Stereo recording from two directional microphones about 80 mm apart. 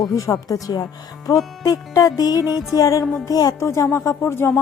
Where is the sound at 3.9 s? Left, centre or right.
Left.